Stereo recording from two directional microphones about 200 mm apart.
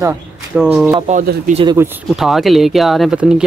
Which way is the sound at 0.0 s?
10° right (ahead or behind).